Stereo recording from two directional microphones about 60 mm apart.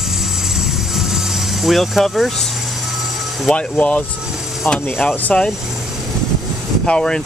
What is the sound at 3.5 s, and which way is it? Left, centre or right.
Speech, left.